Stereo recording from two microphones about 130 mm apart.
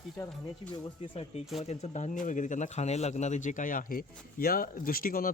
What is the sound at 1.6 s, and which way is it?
Speech, 60° left (ahead or behind).